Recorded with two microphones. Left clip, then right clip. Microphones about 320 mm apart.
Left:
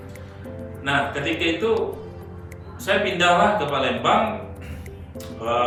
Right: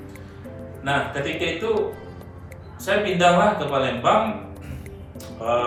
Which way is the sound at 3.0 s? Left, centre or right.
Centre.